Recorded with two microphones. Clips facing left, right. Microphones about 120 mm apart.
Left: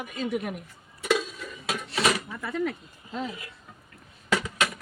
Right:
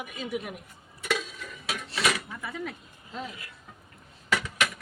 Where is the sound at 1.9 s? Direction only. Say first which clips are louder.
Left 3 dB; 30° left (ahead or behind).